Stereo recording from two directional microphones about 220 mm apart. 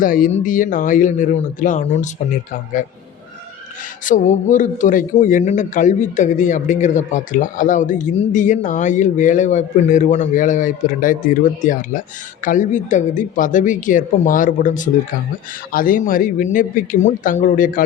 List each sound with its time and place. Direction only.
0.0 s a man's voice: 40° left (ahead or behind)
4.0 s a man's voice: 35° left (ahead or behind)